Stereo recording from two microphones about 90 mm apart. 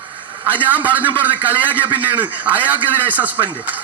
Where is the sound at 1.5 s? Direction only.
20° right (ahead or behind).